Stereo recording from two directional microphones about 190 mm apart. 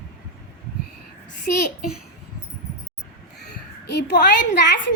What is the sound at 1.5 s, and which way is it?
Speech, 50° left (ahead or behind).